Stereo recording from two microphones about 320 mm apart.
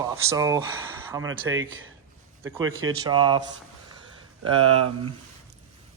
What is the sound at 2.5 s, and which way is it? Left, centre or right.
Speech, right.